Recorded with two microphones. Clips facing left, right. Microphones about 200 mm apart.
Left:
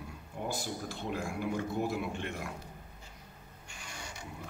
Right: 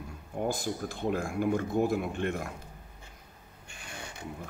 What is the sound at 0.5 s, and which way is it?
Speech, 50° right (ahead or behind).